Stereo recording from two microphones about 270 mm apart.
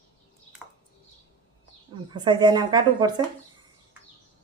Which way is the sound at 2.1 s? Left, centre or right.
Centre.